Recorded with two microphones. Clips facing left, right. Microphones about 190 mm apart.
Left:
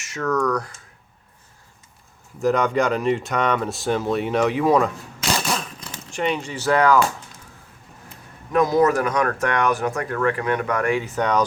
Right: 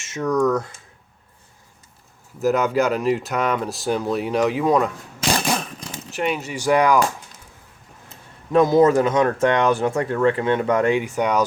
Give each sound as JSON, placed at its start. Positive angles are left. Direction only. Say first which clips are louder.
{"t": 0.0, "sound": "speech", "louder": "right 3 dB", "side_deg": -20}
{"t": 2.4, "sound": "speech", "louder": "right 1 dB", "side_deg": -5}
{"t": 6.1, "sound": "speech", "louder": "even", "side_deg": -5}
{"t": 8.5, "sound": "speech", "louder": "right 3 dB", "side_deg": -25}
{"t": 11.0, "sound": "speech", "louder": "right 1 dB", "side_deg": -10}